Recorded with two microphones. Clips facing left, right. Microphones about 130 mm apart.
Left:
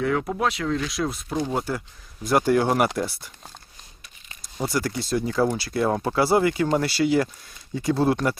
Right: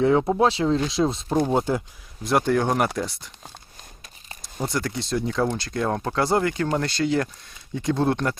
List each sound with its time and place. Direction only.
0.0 s speech: 25° right (ahead or behind)
2.2 s speech: centre (ahead or behind)